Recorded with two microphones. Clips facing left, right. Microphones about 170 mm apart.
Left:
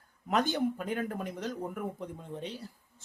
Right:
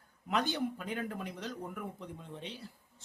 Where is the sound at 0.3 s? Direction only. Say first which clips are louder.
Left 4 dB; 45° left (ahead or behind).